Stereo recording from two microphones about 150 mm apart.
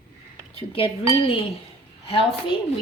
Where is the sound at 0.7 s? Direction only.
40° left (ahead or behind).